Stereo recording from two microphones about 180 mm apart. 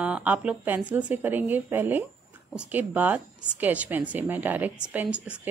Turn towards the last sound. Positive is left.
turn(degrees=-5)  # may be behind; listen again after turning